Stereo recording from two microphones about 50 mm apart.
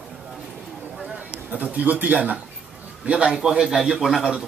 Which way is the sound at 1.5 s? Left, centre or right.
Right.